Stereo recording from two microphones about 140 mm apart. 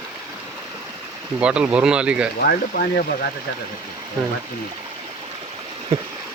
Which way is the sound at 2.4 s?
90° left.